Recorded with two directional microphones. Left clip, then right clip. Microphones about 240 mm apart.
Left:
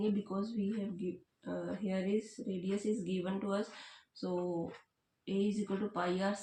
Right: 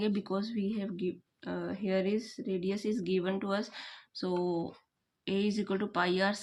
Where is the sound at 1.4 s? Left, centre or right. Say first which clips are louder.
Right 4 dB; right.